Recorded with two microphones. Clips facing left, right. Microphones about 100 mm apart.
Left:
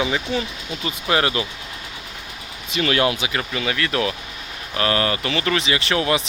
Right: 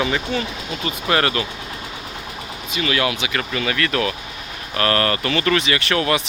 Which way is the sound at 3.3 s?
15° left (ahead or behind).